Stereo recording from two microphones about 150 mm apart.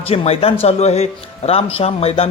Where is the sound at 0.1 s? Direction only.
40° left (ahead or behind).